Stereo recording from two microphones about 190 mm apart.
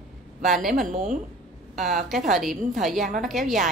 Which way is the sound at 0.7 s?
40° right (ahead or behind).